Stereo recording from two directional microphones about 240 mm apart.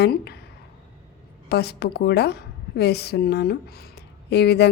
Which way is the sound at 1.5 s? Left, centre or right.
Left.